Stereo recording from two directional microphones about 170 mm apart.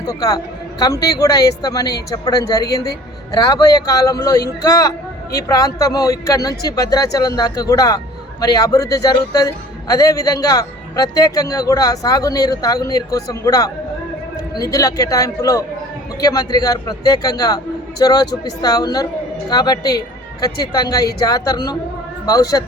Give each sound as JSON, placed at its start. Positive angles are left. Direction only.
{"t": 0.0, "sound": "speech", "side_deg": 20}